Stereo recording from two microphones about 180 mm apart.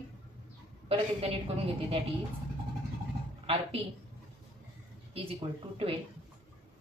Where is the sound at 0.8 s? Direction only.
30° right (ahead or behind).